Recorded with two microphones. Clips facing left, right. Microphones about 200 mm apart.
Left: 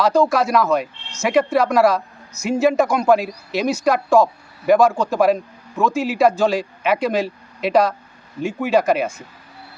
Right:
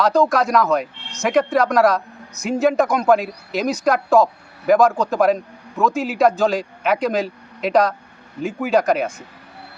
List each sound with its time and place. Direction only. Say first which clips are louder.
0.0 s speech: even; centre (ahead or behind)